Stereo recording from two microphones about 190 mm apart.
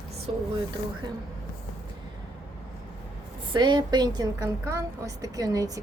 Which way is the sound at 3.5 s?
25° right (ahead or behind).